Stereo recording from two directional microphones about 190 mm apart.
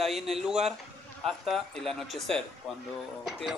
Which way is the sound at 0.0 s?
Centre (ahead or behind).